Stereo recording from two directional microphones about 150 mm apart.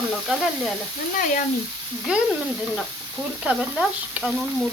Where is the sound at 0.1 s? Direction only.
Centre (ahead or behind).